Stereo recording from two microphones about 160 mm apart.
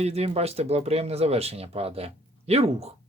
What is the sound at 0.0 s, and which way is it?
Speech, 40° right (ahead or behind).